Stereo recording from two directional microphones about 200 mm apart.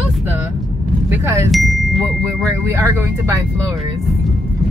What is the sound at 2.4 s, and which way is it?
Speech, 15° right (ahead or behind).